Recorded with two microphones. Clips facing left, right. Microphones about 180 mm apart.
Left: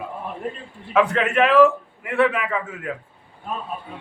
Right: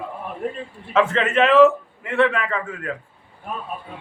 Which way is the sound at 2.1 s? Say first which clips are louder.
Even; 10° left (ahead or behind).